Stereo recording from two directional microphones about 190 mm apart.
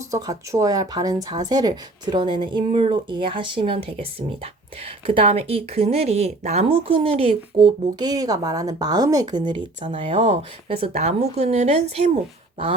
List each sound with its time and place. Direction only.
0.1 s speech: 20° right (ahead or behind)